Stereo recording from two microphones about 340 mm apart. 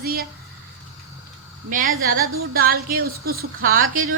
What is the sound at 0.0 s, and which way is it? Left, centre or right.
Speech, right.